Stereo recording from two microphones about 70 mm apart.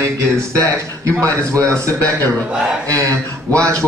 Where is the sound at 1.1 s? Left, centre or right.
Right.